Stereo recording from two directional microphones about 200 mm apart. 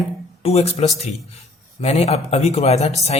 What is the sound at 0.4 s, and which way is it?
Speech, 30° left (ahead or behind).